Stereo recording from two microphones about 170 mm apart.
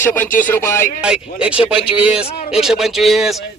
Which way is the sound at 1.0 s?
5° right (ahead or behind).